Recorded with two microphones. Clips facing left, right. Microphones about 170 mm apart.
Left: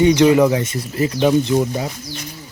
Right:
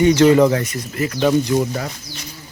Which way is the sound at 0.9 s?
25° left (ahead or behind).